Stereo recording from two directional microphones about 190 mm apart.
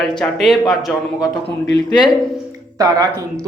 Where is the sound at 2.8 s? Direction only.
20° right (ahead or behind).